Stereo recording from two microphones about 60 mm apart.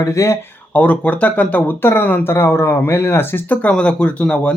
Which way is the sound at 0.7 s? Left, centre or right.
Left.